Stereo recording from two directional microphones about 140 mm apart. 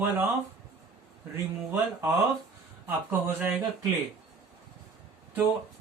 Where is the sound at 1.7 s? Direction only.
10° right (ahead or behind).